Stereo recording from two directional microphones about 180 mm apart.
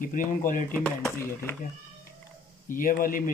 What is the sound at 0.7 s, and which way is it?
Speech, 5° left (ahead or behind).